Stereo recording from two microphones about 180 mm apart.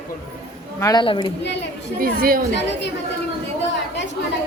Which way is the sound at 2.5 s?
75° left (ahead or behind).